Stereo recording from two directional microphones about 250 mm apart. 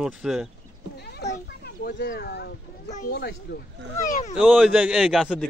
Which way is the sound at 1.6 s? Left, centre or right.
Left.